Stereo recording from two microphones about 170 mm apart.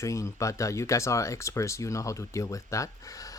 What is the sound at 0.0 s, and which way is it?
Speech, 20° left (ahead or behind).